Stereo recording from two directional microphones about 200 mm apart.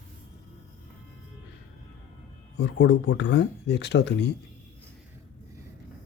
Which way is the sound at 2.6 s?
65° left (ahead or behind).